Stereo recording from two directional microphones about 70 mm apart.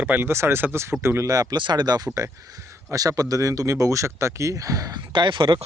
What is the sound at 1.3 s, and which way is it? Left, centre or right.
Speech, right.